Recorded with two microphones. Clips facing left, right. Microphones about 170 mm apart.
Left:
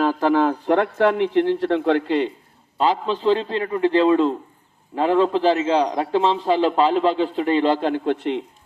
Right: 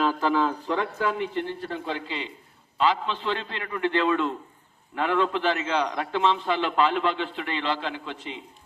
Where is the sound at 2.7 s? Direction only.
40° left (ahead or behind); by 8.4 s 60° left (ahead or behind).